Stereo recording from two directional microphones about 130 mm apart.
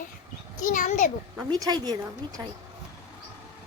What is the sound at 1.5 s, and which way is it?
Speech, 30° right (ahead or behind).